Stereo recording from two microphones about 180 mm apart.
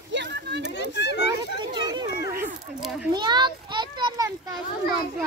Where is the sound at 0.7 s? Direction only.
70° left (ahead or behind).